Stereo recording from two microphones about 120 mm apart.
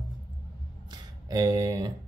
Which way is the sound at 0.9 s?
30° right (ahead or behind).